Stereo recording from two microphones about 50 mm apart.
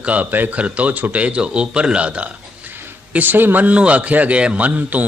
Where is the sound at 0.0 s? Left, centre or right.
Right.